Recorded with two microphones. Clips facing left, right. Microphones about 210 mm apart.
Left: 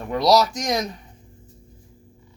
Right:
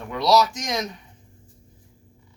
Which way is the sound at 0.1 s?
40° left (ahead or behind).